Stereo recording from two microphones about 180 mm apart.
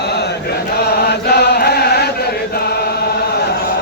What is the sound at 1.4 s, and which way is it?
Chant, 65° left (ahead or behind).